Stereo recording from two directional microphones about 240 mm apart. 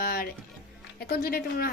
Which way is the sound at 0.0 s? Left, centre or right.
Left.